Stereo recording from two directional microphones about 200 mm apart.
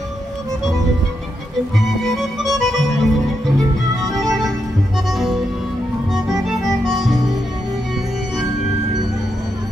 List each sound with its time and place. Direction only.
1.8 s accordion: centre (ahead or behind)
4.0 s music: centre (ahead or behind)
6.1 s music: centre (ahead or behind)